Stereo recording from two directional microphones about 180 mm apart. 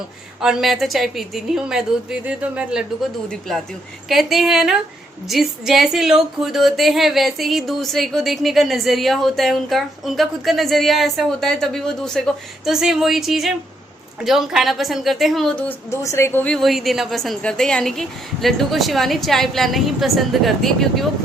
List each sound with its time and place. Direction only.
0.4 s speech: centre (ahead or behind)
4.1 s speech: centre (ahead or behind)
15.9 s speech: 15° left (ahead or behind)